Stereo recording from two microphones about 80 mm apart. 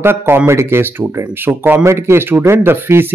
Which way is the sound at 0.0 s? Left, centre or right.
Right.